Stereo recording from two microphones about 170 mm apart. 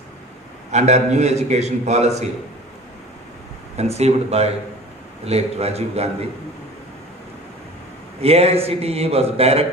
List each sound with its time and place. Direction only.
0.7 s a man's voice: 40° right (ahead or behind)
3.8 s a man's voice: 40° right (ahead or behind)
8.2 s a man's voice: 35° right (ahead or behind)